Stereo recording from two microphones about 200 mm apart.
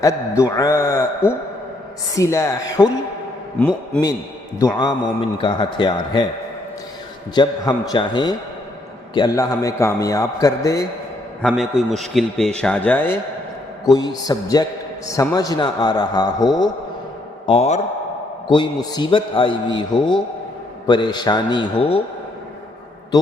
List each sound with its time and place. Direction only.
0.0 s a man's voice: 15° left (ahead or behind)
4.6 s a man's voice: 20° left (ahead or behind)
7.3 s a man's voice: 20° left (ahead or behind)
11.4 s a man's voice: centre (ahead or behind)
13.9 s a man's voice: 20° left (ahead or behind)
17.4 s a man's voice: 30° left (ahead or behind)
23.1 s a sound: 20° left (ahead or behind)